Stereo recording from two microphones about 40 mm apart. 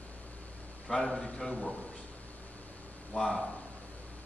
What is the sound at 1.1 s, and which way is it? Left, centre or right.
Speech, centre.